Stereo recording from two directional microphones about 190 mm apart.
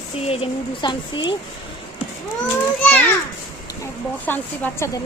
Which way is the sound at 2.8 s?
10° left (ahead or behind).